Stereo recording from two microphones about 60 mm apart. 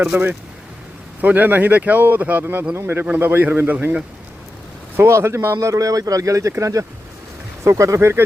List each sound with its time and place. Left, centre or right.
0.1 s a man's voice: right
3.0 s a man's voice: right
4.9 s speech: right
5.5 s speech: right
7.6 s speech: right